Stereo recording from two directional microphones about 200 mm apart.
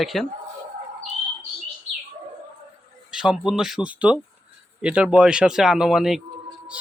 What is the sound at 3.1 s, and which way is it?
Speech, 5° right (ahead or behind).